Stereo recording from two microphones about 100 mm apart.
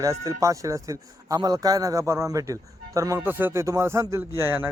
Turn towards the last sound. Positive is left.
turn(degrees=-20)  # may be behind; listen again after turning